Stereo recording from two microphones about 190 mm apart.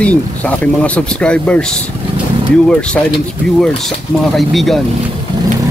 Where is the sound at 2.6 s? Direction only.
5° left (ahead or behind).